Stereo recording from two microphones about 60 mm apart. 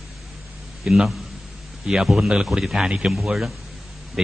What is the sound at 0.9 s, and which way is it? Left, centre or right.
A man's voice, centre.